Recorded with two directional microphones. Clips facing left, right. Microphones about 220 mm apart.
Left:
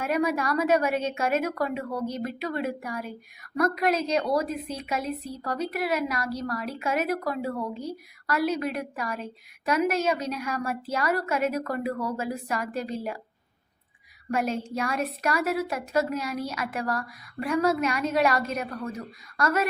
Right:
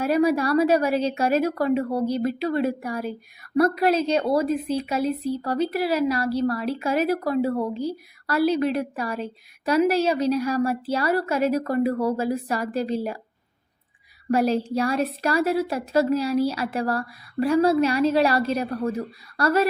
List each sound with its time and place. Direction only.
0.0 s a woman's voice: 30° right (ahead or behind)
14.3 s a woman's voice: 35° right (ahead or behind)